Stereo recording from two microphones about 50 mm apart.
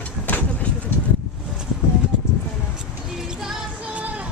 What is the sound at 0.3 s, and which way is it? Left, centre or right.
Vehicle, left.